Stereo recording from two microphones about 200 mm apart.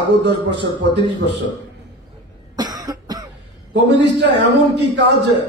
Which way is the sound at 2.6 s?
20° right (ahead or behind).